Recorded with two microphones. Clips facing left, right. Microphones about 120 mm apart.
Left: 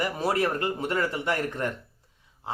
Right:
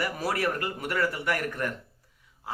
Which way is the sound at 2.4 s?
25° left (ahead or behind).